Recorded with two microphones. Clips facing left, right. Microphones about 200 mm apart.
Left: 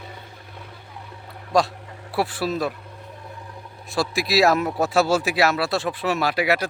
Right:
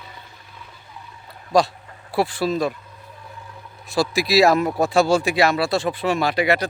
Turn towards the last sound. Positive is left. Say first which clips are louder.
# right 2 dB
turn(degrees=5)  # may be behind; listen again after turning